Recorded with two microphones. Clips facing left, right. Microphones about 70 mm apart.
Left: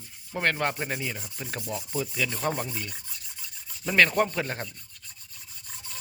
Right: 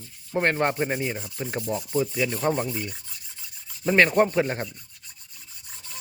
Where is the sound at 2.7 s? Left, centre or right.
Centre.